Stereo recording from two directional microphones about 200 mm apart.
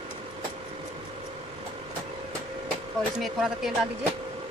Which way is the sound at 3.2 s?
Centre (ahead or behind).